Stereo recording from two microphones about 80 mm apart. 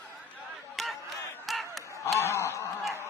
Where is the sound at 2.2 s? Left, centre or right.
Left.